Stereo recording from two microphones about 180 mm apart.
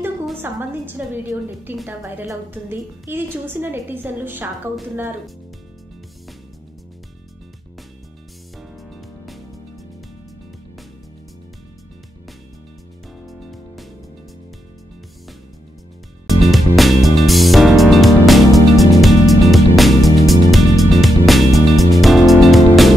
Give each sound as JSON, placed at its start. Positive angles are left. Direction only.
{"t": 0.4, "sound": "a woman's voice", "side_deg": -10}
{"t": 8.5, "sound": "music", "side_deg": 0}
{"t": 13.2, "sound": "music", "side_deg": 0}
{"t": 16.3, "sound": "music", "side_deg": 0}